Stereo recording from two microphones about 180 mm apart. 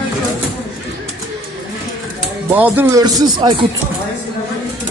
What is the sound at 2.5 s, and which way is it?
Speech, 10° right (ahead or behind).